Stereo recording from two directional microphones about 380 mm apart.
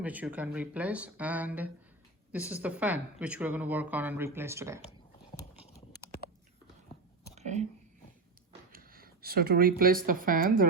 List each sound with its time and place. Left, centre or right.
0.0 s speech: centre
7.3 s whispering: centre
8.7 s speech: right